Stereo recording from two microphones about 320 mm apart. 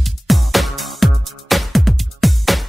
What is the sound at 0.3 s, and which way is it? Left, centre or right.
Music, centre.